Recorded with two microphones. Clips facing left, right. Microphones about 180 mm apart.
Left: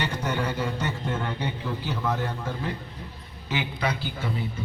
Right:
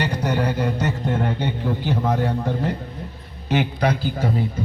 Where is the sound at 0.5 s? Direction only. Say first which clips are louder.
Right 6 dB; 70° right (ahead or behind).